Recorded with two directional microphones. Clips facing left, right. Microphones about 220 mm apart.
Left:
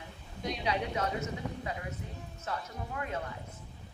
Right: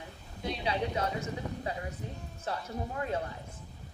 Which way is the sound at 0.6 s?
30° right (ahead or behind).